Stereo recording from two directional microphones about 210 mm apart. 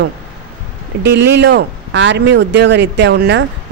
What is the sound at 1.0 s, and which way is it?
Speech, 55° right (ahead or behind).